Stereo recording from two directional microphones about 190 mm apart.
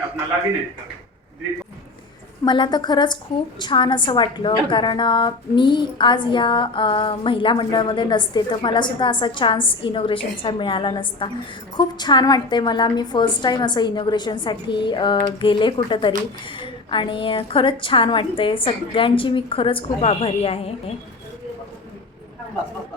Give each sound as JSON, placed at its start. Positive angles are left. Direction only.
{"t": 2.4, "sound": "a woman's voice", "side_deg": 25}